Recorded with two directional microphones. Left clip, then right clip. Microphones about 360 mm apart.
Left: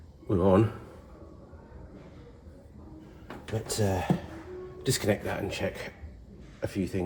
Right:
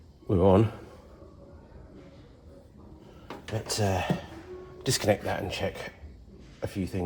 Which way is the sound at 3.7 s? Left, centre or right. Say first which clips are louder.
Right 1 dB; centre.